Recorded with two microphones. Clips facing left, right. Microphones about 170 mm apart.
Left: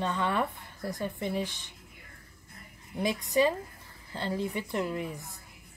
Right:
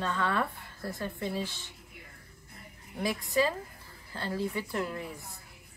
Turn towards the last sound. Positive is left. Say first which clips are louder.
# left 2 dB
turn(degrees=20)  # may be behind; listen again after turning